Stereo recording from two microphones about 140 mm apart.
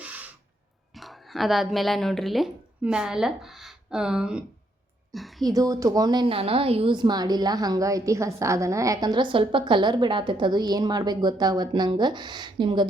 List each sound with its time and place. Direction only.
0.0 s a sound: 10° right (ahead or behind)
0.9 s a woman's voice: centre (ahead or behind)
5.5 s a woman's voice: 25° right (ahead or behind)